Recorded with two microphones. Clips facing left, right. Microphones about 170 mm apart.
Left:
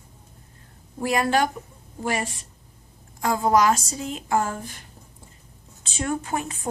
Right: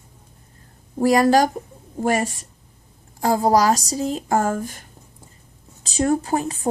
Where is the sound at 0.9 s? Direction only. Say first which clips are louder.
Right 7 dB; 40° right (ahead or behind).